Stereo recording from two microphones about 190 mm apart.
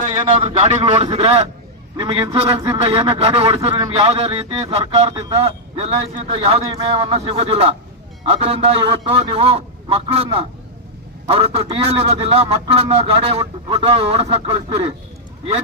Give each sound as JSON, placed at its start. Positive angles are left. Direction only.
{"t": 0.0, "sound": "a man's voice", "side_deg": -35}